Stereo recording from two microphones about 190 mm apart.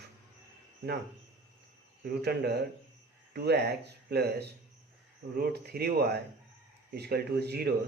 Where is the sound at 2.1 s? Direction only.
55° right (ahead or behind).